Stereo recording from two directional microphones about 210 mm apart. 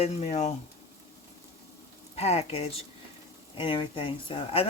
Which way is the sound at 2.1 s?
30° left (ahead or behind).